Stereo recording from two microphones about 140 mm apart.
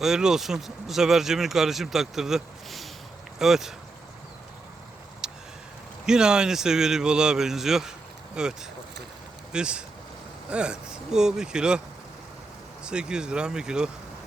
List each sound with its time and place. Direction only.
0.0 s speech: 5° right (ahead or behind)
5.2 s a sound: 5° right (ahead or behind)
6.1 s speech: 5° right (ahead or behind)
12.8 s speech: 5° right (ahead or behind)